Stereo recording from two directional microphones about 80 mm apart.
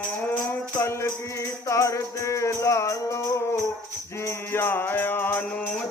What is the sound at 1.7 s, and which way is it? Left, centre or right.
Music, left.